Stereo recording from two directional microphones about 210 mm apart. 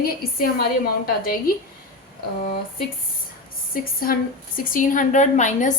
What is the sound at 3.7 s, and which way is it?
A woman's voice, 45° left (ahead or behind).